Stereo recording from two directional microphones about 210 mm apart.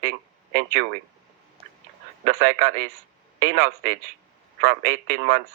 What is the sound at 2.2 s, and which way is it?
Speech, 40° right (ahead or behind).